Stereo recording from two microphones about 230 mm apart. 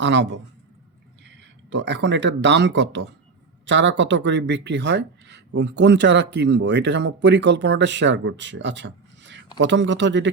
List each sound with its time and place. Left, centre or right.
0.0 s speech: right